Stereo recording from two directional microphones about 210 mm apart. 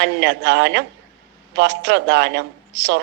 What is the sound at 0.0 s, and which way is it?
A woman's voice, 55° right (ahead or behind).